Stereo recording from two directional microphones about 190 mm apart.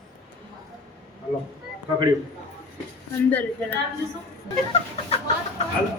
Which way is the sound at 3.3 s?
10° left (ahead or behind).